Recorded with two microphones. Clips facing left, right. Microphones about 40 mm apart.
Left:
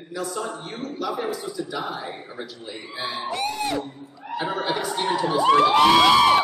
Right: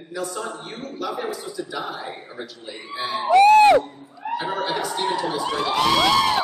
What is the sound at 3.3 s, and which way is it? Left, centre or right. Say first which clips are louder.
Speech: right 17 dB; right.